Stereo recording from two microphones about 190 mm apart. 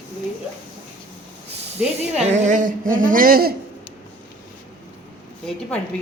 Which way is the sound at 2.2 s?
40° right (ahead or behind).